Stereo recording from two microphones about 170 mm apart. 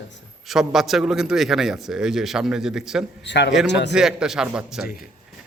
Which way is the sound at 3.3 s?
90° left.